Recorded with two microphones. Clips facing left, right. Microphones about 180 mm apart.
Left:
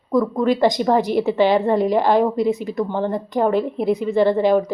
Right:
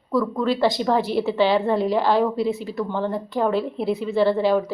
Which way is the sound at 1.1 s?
50° left (ahead or behind).